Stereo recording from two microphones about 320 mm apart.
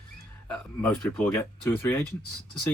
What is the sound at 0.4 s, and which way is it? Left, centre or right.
Speech, centre.